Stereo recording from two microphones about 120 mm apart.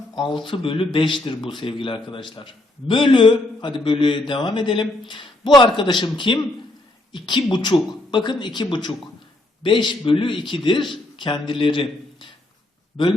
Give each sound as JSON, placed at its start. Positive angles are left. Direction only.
{"t": 0.2, "sound": "speech", "side_deg": 45}